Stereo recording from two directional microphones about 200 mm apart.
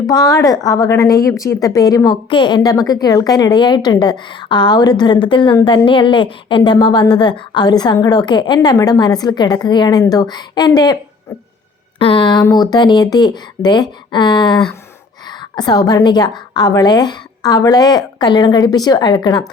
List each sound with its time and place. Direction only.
0.1 s a woman's voice: 20° left (ahead or behind)
11.9 s a woman's voice: 25° left (ahead or behind)